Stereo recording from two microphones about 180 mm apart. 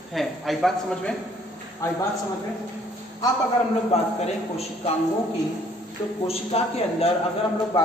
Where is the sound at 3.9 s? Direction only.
35° left (ahead or behind).